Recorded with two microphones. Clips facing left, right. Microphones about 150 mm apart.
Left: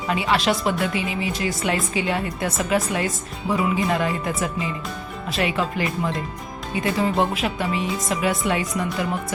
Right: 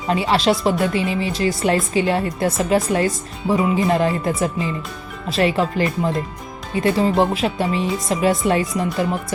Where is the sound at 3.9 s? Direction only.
35° right (ahead or behind).